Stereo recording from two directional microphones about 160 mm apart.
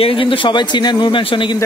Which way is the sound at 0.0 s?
35° left (ahead or behind).